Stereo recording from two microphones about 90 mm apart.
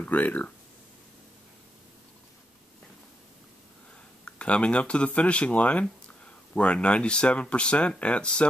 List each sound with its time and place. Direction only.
0.0 s speech: 20° left (ahead or behind)
4.2 s speech: 10° left (ahead or behind)